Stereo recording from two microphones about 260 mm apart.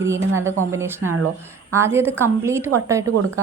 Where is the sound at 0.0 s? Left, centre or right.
Centre.